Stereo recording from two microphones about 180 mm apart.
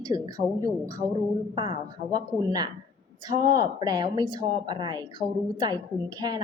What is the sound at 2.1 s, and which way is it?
Speech, 25° right (ahead or behind).